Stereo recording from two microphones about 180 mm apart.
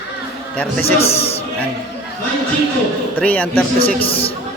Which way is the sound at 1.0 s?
35° left (ahead or behind).